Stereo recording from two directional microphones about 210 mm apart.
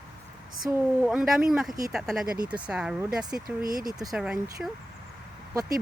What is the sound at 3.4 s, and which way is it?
Speech, 45° right (ahead or behind).